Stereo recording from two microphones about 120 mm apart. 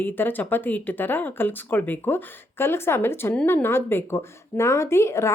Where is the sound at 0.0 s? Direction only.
15° left (ahead or behind).